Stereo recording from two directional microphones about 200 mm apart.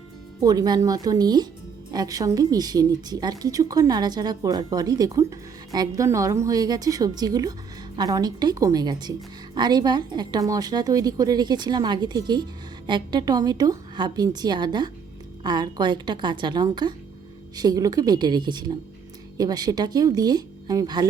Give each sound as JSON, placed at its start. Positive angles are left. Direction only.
{"t": 0.4, "sound": "a woman's voice", "side_deg": -20}